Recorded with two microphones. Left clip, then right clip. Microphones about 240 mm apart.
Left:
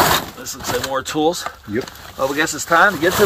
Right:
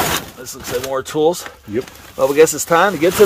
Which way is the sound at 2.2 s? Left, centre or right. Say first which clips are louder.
Right 7 dB; right.